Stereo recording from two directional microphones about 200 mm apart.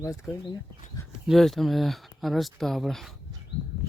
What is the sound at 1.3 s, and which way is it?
Speech, centre (ahead or behind).